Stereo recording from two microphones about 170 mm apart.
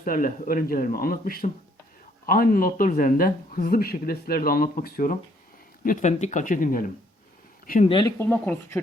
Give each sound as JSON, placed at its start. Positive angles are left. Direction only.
{"t": 0.0, "sound": "speech", "side_deg": 55}
{"t": 7.9, "sound": "speech", "side_deg": 30}
{"t": 8.2, "sound": "speech", "side_deg": 10}